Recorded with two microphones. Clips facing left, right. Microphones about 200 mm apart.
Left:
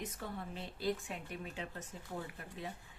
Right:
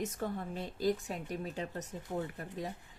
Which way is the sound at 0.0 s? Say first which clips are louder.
Right 7 dB; 45° right (ahead or behind).